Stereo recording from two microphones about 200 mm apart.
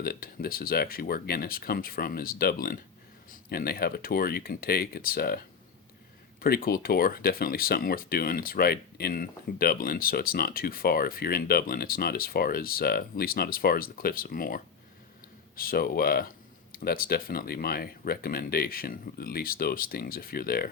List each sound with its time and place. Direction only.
0.0 s speech: 50° left (ahead or behind)
6.4 s speech: 45° left (ahead or behind)